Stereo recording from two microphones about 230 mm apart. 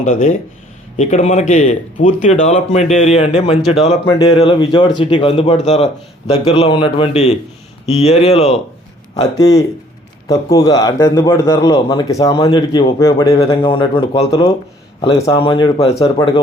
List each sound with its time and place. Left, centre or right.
0.0 s speech: left
9.1 s a man's voice: centre